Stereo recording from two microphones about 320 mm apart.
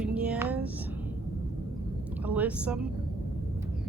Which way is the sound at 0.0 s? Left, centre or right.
Centre.